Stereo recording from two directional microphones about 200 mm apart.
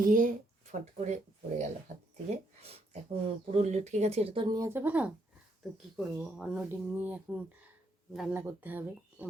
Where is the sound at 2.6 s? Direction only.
30° right (ahead or behind).